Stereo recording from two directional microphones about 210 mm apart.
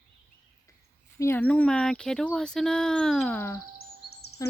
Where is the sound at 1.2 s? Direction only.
10° left (ahead or behind).